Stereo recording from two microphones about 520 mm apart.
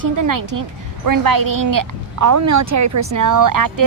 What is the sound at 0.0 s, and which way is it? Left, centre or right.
A woman's voice, right.